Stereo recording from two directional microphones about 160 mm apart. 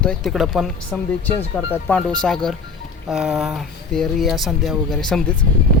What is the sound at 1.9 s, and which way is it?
Speech, 10° left (ahead or behind).